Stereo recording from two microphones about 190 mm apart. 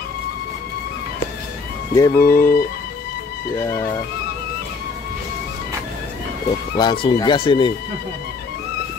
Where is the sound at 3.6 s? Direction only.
15° left (ahead or behind).